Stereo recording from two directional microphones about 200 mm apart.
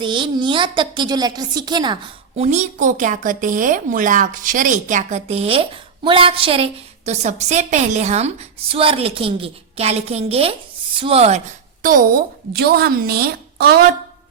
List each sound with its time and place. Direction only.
0.0 s a woman's voice: 25° right (ahead or behind)
2.4 s a woman's voice: 35° right (ahead or behind); by 13.8 s 50° right (ahead or behind)